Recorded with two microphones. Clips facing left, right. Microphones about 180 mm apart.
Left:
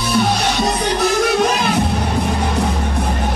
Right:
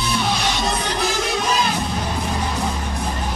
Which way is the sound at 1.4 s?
60° left (ahead or behind).